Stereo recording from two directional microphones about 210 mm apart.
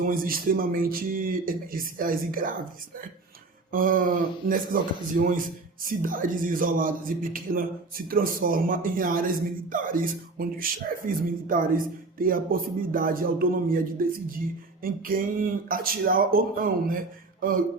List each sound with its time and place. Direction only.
0.0 s speech: 45° right (ahead or behind)
3.7 s speech: 40° right (ahead or behind)